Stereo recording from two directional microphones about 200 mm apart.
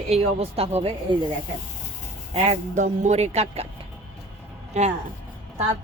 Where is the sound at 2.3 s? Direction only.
35° right (ahead or behind).